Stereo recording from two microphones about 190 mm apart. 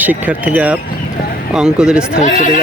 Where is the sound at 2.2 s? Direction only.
40° left (ahead or behind).